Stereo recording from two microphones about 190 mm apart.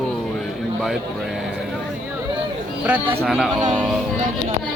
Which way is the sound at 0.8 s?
Centre (ahead or behind).